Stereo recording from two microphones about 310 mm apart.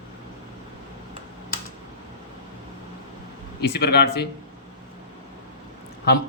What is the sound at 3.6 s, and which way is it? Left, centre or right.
Speech, left.